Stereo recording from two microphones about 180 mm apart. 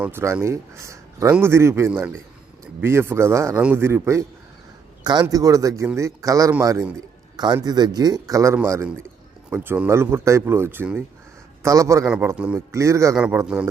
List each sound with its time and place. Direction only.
0.0 s speech: 15° right (ahead or behind)
5.2 s speech: 20° right (ahead or behind)
12.0 s a man's voice: 5° right (ahead or behind)